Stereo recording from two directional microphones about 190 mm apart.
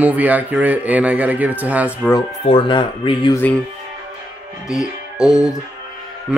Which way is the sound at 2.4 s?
25° left (ahead or behind).